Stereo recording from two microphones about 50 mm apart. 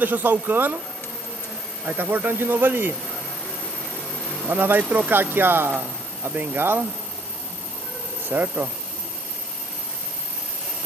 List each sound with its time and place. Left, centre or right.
0.0 s speech: right
1.9 s speech: right
4.5 s speech: right
5.1 s speech: right
5.7 s speech: right
8.3 s speech: right